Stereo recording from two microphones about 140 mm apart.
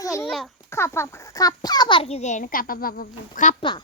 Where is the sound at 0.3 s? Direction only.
Centre (ahead or behind).